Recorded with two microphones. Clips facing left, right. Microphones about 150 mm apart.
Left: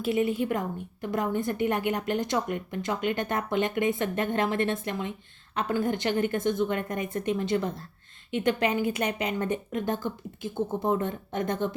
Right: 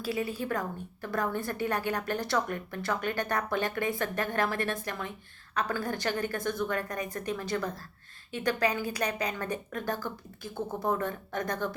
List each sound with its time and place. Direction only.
0.0 s a woman's voice: 20° left (ahead or behind)